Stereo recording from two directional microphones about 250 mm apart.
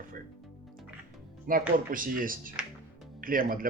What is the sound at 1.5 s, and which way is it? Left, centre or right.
Speech, right.